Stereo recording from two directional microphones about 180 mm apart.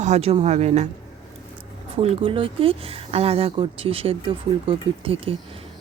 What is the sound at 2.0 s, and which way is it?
Speech, 30° right (ahead or behind).